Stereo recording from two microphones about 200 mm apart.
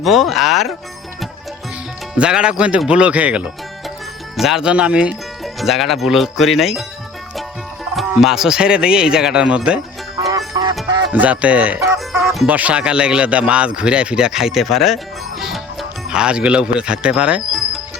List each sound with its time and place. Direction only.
0.0 s speech: centre (ahead or behind)
2.1 s speech: 5° right (ahead or behind)
7.9 s speech: centre (ahead or behind)
10.2 s music: 15° right (ahead or behind)
11.1 s speech: 5° right (ahead or behind)